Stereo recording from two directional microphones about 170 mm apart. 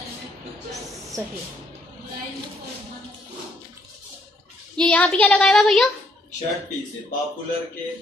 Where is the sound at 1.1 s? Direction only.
20° right (ahead or behind).